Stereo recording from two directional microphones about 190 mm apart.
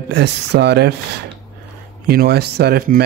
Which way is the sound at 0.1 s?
60° right (ahead or behind).